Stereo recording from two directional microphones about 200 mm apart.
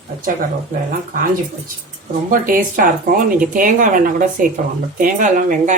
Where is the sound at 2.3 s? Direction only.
45° right (ahead or behind).